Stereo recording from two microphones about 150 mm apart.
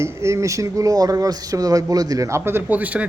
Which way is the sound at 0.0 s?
20° right (ahead or behind).